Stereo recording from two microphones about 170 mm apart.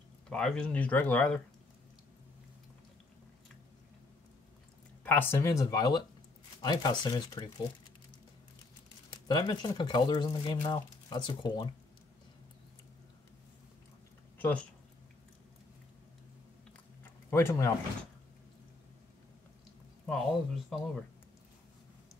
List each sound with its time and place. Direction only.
0.3 s speech: 5° left (ahead or behind)
5.0 s speech: 10° left (ahead or behind)
9.1 s speech: 25° left (ahead or behind)
14.4 s speech: 5° left (ahead or behind)
17.0 s a sound: 15° left (ahead or behind)
20.1 s speech: centre (ahead or behind)